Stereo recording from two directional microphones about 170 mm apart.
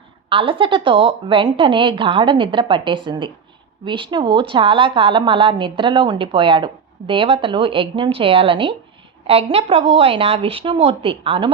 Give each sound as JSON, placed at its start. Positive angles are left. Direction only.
{"t": 0.3, "sound": "a woman's voice", "side_deg": -30}